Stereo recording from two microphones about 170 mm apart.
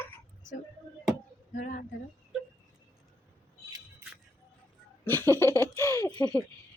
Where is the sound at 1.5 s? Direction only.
45° left (ahead or behind).